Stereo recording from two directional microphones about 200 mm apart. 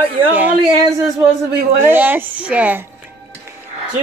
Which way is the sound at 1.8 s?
10° right (ahead or behind).